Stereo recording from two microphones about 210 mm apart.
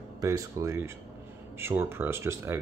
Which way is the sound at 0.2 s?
15° right (ahead or behind).